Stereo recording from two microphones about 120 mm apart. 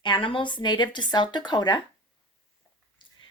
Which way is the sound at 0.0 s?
45° left (ahead or behind).